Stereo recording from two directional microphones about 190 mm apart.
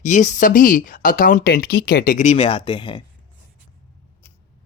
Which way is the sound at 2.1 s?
35° left (ahead or behind).